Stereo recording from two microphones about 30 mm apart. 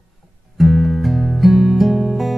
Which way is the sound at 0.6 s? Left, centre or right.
Centre.